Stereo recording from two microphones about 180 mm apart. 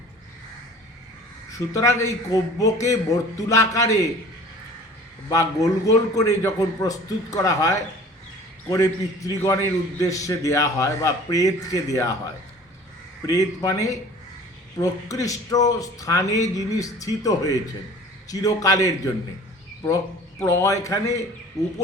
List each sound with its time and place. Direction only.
1.5 s a man's voice: 15° left (ahead or behind)
5.3 s a man's voice: 20° left (ahead or behind)
20.4 s a man's voice: 15° left (ahead or behind)